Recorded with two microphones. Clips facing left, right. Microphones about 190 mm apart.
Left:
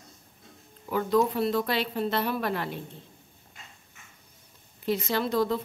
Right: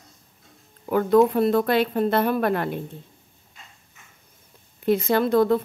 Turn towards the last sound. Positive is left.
turn(degrees=-55)  # may be behind; listen again after turning